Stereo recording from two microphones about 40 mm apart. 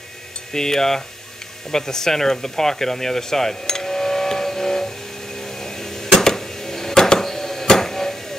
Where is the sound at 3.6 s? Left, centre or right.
Centre.